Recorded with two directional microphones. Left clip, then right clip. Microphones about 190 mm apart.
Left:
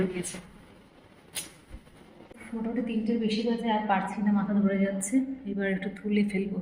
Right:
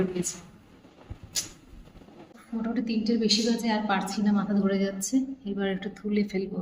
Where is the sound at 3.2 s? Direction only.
Centre (ahead or behind).